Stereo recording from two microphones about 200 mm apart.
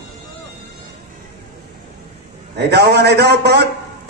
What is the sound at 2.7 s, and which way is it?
Speech, 55° right (ahead or behind).